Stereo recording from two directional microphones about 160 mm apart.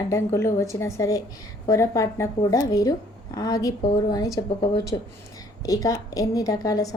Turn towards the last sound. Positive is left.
turn(degrees=20)  # may be behind; listen again after turning